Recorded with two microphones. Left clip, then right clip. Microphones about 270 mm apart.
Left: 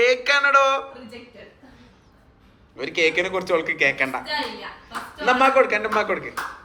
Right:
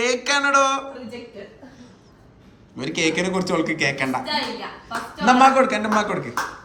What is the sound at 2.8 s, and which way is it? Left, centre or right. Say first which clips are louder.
A man's voice: left 1 dB; centre.